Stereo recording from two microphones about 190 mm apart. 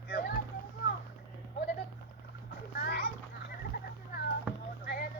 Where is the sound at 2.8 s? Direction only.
55° left (ahead or behind).